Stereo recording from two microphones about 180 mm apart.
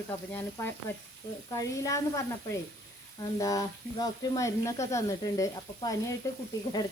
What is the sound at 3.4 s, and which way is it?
Speech, 20° left (ahead or behind).